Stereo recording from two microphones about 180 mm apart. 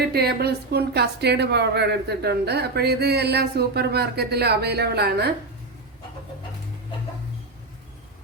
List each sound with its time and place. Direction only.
0.1 s a woman's voice: 60° right (ahead or behind)